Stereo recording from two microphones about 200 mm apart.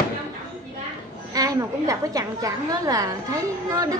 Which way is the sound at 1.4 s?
15° right (ahead or behind).